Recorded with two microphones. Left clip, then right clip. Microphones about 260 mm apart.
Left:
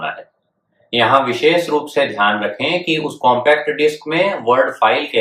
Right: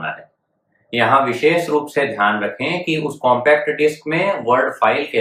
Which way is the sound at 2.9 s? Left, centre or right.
Centre.